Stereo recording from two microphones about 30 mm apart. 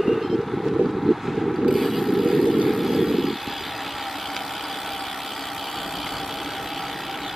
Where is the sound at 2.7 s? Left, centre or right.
Centre.